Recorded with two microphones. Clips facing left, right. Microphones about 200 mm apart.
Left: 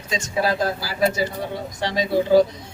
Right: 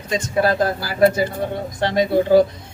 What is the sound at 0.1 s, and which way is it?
Speech, 55° right (ahead or behind).